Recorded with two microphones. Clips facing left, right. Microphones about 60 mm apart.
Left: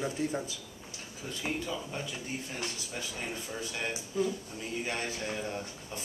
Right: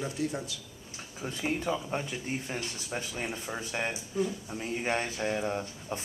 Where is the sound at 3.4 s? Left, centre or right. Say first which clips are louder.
Right 3 dB; right.